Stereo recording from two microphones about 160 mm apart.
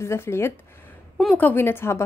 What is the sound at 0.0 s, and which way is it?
A woman's voice, 15° left (ahead or behind).